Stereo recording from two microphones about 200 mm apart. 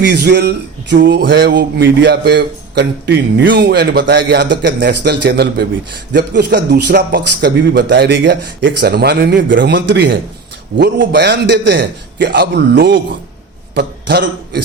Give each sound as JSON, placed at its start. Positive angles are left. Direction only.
{"t": 0.0, "sound": "speech", "side_deg": -50}